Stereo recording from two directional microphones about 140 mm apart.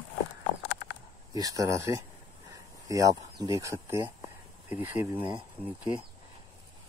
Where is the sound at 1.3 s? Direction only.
25° right (ahead or behind).